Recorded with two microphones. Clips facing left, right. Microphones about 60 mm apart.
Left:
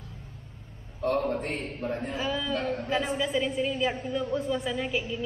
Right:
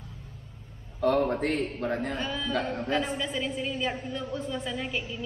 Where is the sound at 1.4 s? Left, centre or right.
Right.